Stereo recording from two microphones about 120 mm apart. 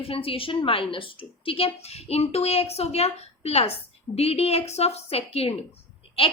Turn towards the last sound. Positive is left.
turn(degrees=50)  # may be behind; listen again after turning